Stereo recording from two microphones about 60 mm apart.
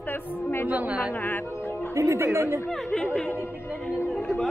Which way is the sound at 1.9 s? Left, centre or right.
Right.